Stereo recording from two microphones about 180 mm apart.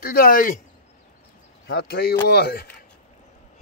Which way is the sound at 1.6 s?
65° left (ahead or behind).